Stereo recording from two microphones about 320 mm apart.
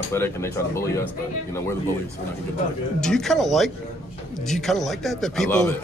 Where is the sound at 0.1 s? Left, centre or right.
Centre.